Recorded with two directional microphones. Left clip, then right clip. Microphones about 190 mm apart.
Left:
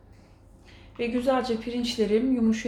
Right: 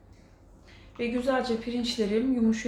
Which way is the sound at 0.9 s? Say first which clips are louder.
Left 2 dB; 30° left (ahead or behind).